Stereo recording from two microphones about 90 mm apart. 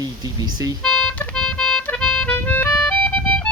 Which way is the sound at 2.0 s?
10° left (ahead or behind).